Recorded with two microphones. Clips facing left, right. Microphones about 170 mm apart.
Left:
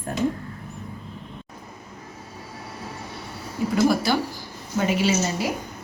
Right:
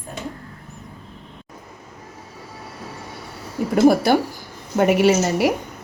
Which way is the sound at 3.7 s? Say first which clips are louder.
Right 6 dB; 60° right (ahead or behind).